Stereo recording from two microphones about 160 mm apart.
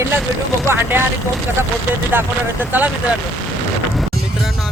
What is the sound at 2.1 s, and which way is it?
Speech, 10° right (ahead or behind).